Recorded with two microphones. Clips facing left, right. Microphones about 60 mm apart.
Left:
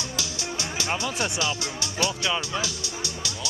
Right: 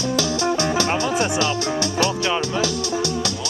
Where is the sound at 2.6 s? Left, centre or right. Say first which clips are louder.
Right 11 dB; right.